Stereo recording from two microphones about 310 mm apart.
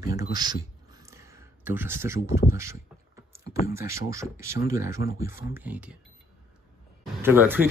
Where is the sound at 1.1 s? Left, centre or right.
Centre.